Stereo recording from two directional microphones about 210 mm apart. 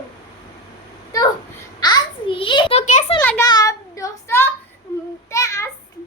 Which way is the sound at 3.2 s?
10° left (ahead or behind).